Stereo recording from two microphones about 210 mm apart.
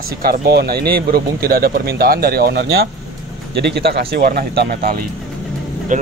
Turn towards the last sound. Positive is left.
turn(degrees=-40)  # may be behind; listen again after turning